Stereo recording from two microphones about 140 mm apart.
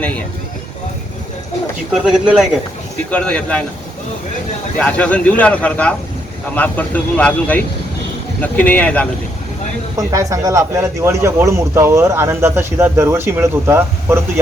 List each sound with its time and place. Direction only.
2.0 s speech: 5° right (ahead or behind)
3.1 s speech: 10° left (ahead or behind)
4.8 s speech: 10° left (ahead or behind)
10.1 s speech: 20° right (ahead or behind)